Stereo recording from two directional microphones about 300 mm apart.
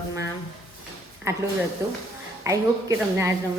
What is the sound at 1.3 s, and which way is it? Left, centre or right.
A woman's voice, centre.